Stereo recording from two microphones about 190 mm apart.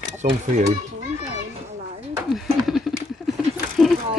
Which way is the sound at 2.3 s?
Centre (ahead or behind).